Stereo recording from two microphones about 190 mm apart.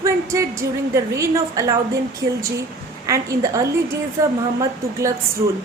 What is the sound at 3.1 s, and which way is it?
A woman's voice, 15° right (ahead or behind).